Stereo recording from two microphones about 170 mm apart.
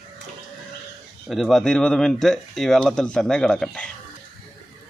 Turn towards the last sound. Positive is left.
turn(degrees=5)  # may be behind; listen again after turning